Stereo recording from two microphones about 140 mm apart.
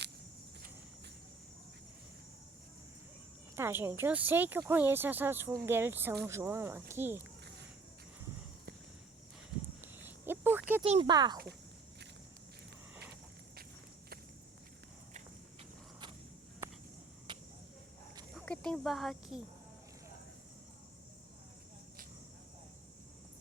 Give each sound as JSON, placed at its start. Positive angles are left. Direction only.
{"t": 3.5, "sound": "speech", "side_deg": -15}
{"t": 9.8, "sound": "a sound", "side_deg": -15}
{"t": 11.0, "sound": "speech", "side_deg": -30}
{"t": 17.3, "sound": "cricket", "side_deg": -35}
{"t": 18.3, "sound": "speech", "side_deg": 5}